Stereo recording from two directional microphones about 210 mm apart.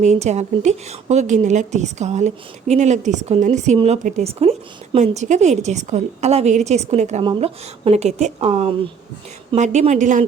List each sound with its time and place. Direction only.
0.0 s a woman's voice: 35° right (ahead or behind)